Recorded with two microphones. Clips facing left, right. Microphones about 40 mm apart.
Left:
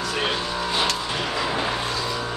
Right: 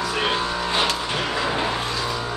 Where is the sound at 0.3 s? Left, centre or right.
Right.